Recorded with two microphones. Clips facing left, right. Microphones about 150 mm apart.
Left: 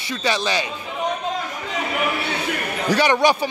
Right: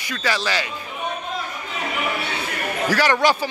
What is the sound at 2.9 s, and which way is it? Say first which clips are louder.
Speech: left 2 dB; 20° left (ahead or behind).